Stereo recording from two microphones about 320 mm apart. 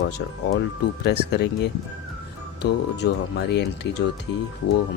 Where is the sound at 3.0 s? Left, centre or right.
Left.